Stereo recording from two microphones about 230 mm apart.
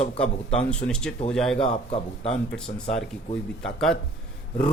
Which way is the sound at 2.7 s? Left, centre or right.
Left.